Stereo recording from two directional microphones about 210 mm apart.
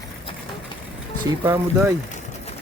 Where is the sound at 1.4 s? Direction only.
10° right (ahead or behind).